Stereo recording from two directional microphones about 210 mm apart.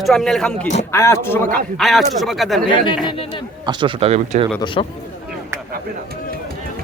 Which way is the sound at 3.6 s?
25° right (ahead or behind).